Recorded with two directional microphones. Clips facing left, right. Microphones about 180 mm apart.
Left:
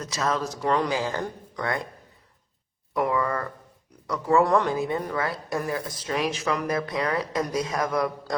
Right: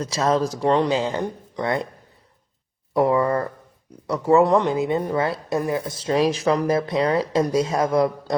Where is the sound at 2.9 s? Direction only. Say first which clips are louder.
Right 6 dB; 30° right (ahead or behind).